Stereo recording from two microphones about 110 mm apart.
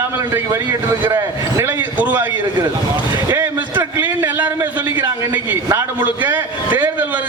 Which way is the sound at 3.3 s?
20° right (ahead or behind).